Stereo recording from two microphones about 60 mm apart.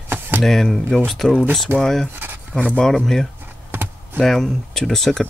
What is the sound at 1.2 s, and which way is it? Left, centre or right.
Speech, left.